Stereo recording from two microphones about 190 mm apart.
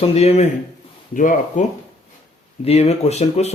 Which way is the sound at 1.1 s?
45° left (ahead or behind).